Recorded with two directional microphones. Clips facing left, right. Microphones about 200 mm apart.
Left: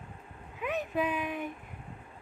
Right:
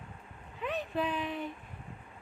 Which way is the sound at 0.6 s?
10° left (ahead or behind).